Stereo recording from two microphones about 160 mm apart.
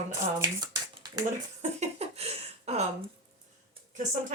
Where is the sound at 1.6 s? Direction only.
45° right (ahead or behind).